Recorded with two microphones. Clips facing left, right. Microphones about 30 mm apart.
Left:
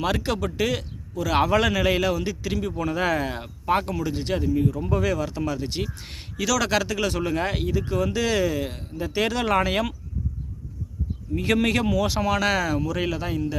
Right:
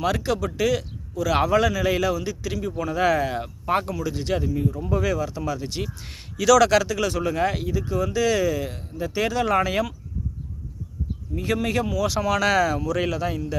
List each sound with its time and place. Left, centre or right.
0.0 s speech: left
1.5 s a man's voice: left
3.0 s speech: centre
3.8 s speech: left
4.4 s speech: centre
4.9 s speech: left
6.4 s speech: centre
6.8 s speech: left
11.3 s speech: left
12.0 s speech: left